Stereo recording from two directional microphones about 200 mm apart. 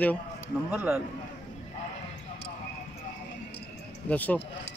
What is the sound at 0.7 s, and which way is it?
Speech, 10° right (ahead or behind).